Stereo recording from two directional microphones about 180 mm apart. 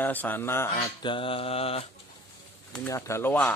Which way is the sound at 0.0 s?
10° left (ahead or behind).